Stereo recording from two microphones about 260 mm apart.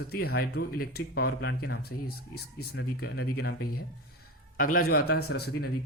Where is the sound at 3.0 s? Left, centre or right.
Left.